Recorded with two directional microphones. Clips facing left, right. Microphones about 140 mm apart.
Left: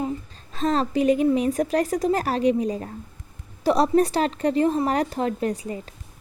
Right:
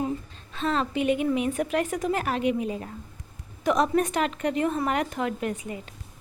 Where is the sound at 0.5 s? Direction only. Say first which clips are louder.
Left 4 dB; 40° left (ahead or behind).